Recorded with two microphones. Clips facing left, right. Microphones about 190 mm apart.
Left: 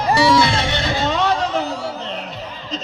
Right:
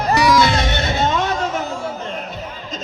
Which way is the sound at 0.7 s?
25° right (ahead or behind).